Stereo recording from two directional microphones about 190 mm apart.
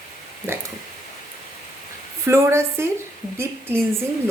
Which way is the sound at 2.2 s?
15° right (ahead or behind).